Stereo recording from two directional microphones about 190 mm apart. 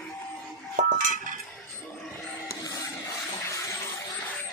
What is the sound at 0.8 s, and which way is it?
Dishes, 40° right (ahead or behind).